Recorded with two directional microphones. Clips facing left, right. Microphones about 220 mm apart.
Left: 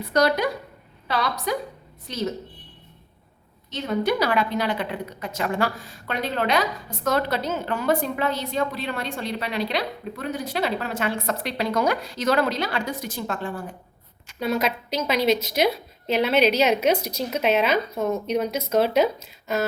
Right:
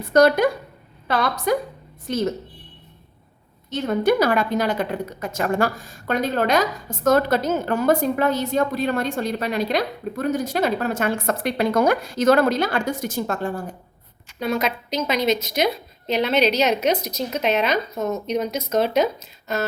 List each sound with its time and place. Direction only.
0.1 s a woman's voice: 50° right (ahead or behind)
3.7 s a woman's voice: 50° right (ahead or behind)
14.3 s a woman's voice: 5° left (ahead or behind)